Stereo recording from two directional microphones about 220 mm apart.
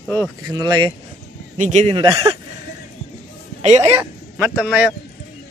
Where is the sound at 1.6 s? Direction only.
30° right (ahead or behind).